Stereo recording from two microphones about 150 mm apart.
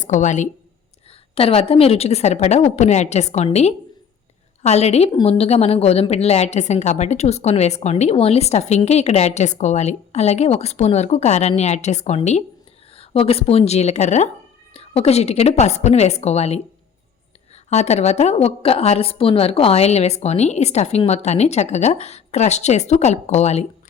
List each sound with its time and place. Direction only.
0.0 s a woman's voice: 55° left (ahead or behind)
1.4 s a woman's voice: 40° left (ahead or behind)